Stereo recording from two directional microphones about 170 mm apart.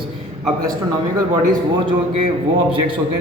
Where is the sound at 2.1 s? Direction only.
30° right (ahead or behind).